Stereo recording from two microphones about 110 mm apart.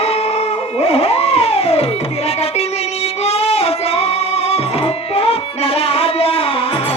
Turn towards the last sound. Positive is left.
turn(degrees=60)  # may be behind; listen again after turning